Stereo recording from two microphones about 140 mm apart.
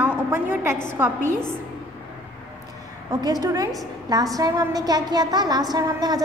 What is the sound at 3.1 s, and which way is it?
A woman's voice, 30° right (ahead or behind).